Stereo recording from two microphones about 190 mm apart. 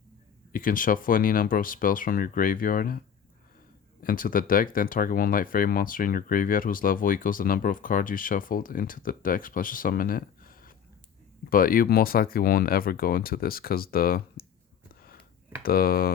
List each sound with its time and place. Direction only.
0.5 s speech: 45° left (ahead or behind)
4.0 s speech: 45° left (ahead or behind)
15.6 s speech: 50° left (ahead or behind)